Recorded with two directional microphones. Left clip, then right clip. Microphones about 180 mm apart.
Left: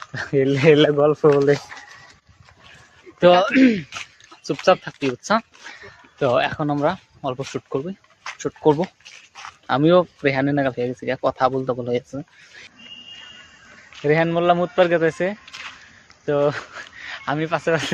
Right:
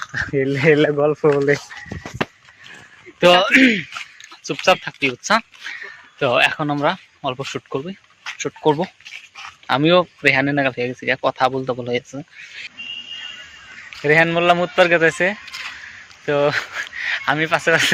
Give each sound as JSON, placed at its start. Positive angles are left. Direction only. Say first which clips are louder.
{"t": 0.1, "sound": "speech", "louder": "left 1 dB", "side_deg": 20}
{"t": 0.9, "sound": "speech", "louder": "left 1 dB", "side_deg": 10}
{"t": 3.2, "sound": "speech", "louder": "right 2 dB", "side_deg": 10}
{"t": 4.6, "sound": "speech", "louder": "right 1 dB", "side_deg": 25}
{"t": 14.0, "sound": "speech", "louder": "right 4 dB", "side_deg": 5}
{"t": 15.4, "sound": "a sound", "louder": "right 5 dB", "side_deg": -5}
{"t": 16.2, "sound": "speech", "louder": "right 2 dB", "side_deg": 10}